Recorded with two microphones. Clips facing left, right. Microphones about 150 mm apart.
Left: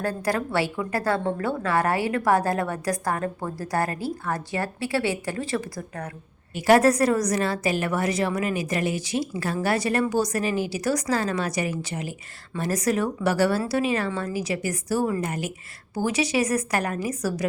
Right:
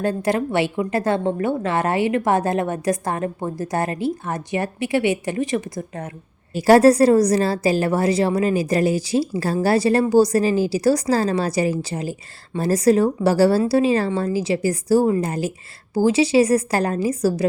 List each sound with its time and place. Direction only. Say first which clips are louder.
0.0 s a woman's voice: right 5 dB; 20° right (ahead or behind)
6.5 s a woman's voice: right 5 dB; 35° right (ahead or behind)